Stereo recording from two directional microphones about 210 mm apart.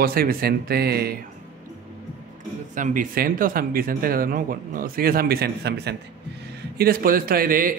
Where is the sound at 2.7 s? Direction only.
40° right (ahead or behind).